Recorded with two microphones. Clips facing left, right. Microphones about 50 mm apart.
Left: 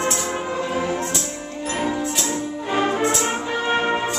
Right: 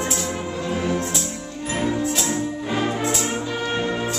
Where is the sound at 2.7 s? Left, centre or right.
Centre.